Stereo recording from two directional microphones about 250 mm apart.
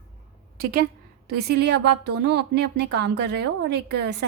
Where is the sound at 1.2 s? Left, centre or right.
Right.